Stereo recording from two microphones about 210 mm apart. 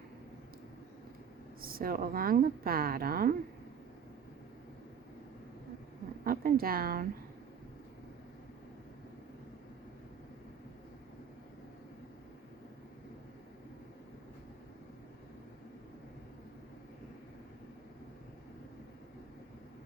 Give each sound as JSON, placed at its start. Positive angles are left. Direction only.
{"t": 1.6, "sound": "a woman's voice", "side_deg": -45}
{"t": 6.2, "sound": "a woman's voice", "side_deg": -45}